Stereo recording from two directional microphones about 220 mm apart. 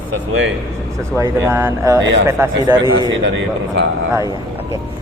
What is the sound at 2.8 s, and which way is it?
Speech, 55° right (ahead or behind).